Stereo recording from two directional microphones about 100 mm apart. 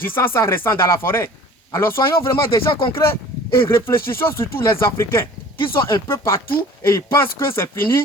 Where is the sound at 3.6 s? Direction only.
25° left (ahead or behind).